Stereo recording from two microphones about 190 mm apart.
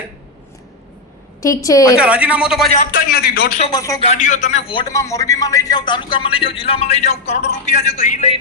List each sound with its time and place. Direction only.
1.4 s a woman's voice: 15° left (ahead or behind)
2.0 s a woman's voice: 5° right (ahead or behind)
2.9 s a man's voice: 50° left (ahead or behind)
3.7 s a man's voice: 20° left (ahead or behind)
4.0 s a man's voice: 35° left (ahead or behind)